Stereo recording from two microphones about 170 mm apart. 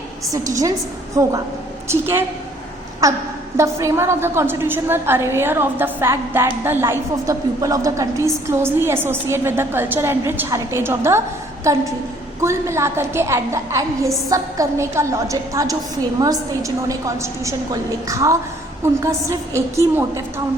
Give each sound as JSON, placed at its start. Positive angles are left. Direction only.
{"t": 0.3, "sound": "a woman's voice", "side_deg": -20}